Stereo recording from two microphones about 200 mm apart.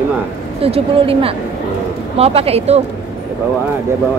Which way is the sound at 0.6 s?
30° right (ahead or behind).